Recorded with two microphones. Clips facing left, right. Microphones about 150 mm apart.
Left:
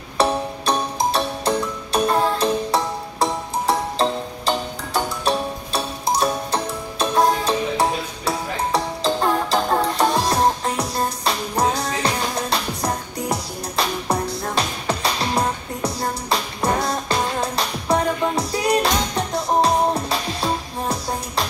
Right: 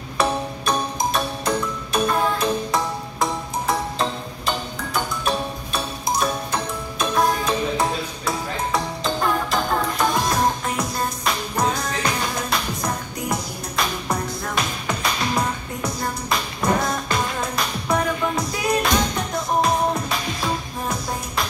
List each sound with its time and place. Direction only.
0.2 s music: 30° left (ahead or behind)